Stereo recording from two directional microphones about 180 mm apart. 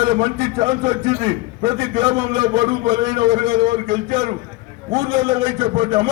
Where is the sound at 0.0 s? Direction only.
25° right (ahead or behind).